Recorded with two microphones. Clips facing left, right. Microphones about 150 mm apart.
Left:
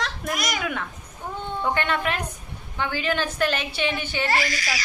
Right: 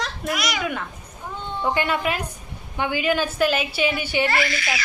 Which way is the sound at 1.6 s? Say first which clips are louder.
Right 2 dB; 5° right (ahead or behind).